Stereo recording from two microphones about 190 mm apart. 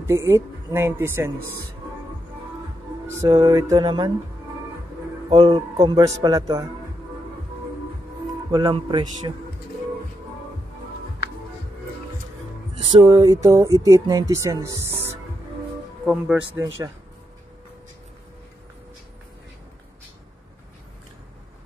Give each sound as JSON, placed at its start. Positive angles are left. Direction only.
{"t": 0.0, "sound": "music", "side_deg": -15}
{"t": 3.3, "sound": "a man's voice", "side_deg": -15}
{"t": 5.3, "sound": "a man's voice", "side_deg": -25}
{"t": 8.5, "sound": "a man's voice", "side_deg": -20}
{"t": 13.0, "sound": "music", "side_deg": -20}
{"t": 16.1, "sound": "speech", "side_deg": -5}